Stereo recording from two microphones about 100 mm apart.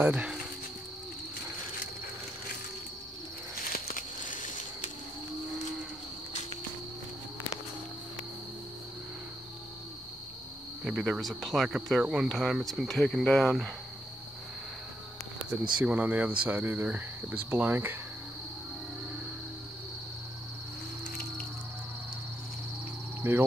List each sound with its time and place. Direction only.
0.0 s speech: 10° right (ahead or behind)
10.8 s speech: 5° right (ahead or behind)
15.5 s speech: 15° right (ahead or behind)
23.2 s speech: 20° right (ahead or behind)